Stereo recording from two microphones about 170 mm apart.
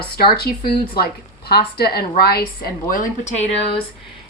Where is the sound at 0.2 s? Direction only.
65° left (ahead or behind).